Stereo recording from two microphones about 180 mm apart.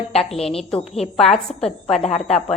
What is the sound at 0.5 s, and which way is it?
Speech, 35° left (ahead or behind).